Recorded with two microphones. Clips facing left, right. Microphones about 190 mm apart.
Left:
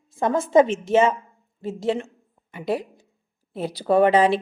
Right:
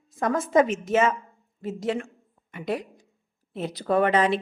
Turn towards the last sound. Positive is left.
turn(degrees=30)  # may be behind; listen again after turning